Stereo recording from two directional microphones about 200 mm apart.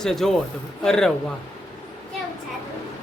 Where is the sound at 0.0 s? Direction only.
Centre (ahead or behind).